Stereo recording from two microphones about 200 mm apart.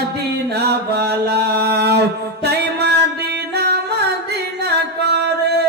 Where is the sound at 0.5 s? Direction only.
55° right (ahead or behind).